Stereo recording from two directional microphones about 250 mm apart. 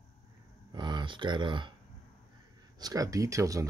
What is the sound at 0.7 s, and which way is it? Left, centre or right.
Speech, centre.